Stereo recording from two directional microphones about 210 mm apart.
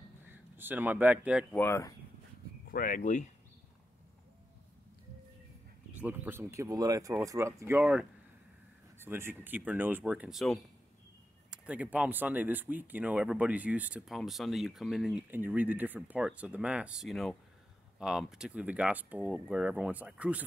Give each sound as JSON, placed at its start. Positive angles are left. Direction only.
{"t": 0.3, "sound": "a man's voice", "side_deg": -10}
{"t": 1.5, "sound": "speech", "side_deg": 10}
{"t": 2.7, "sound": "speech", "side_deg": 40}
{"t": 5.9, "sound": "speech", "side_deg": -10}